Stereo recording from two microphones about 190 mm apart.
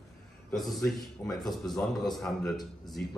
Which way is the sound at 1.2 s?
10° left (ahead or behind).